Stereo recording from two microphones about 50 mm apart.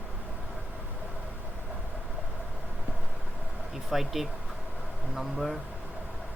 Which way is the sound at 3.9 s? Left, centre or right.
Centre.